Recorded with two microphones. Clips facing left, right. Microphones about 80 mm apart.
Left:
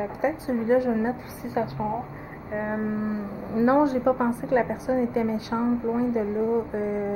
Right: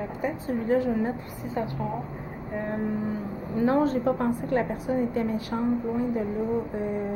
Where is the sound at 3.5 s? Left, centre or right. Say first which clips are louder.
Left 3 dB; centre.